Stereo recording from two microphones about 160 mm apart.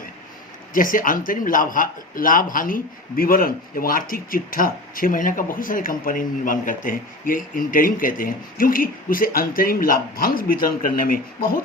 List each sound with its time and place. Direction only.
0.7 s a man's voice: 60° left (ahead or behind)